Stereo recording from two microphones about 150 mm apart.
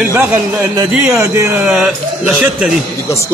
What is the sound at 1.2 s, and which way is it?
Speech, 15° right (ahead or behind).